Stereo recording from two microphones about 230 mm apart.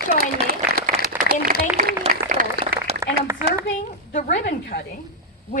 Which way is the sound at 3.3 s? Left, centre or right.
Centre.